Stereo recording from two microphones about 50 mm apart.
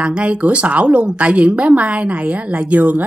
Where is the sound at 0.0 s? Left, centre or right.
Right.